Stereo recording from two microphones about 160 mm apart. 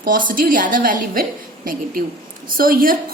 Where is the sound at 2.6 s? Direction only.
60° right (ahead or behind).